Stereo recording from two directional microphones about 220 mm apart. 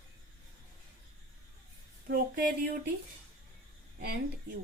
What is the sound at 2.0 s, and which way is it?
Speech, 45° right (ahead or behind).